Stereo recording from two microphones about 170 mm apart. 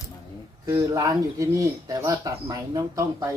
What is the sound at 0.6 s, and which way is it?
Speech, 20° right (ahead or behind).